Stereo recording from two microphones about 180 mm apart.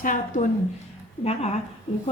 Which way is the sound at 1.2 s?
35° left (ahead or behind).